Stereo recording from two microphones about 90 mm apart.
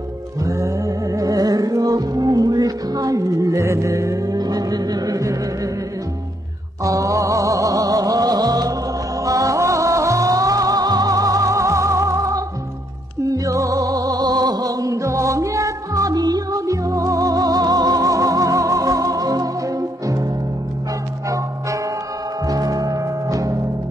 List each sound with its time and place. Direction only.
0.4 s music: 35° right (ahead or behind)
6.8 s music: 40° right (ahead or behind)
22.5 s music: 45° right (ahead or behind)